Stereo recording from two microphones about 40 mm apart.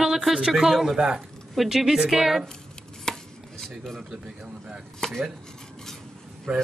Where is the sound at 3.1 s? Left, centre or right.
Centre.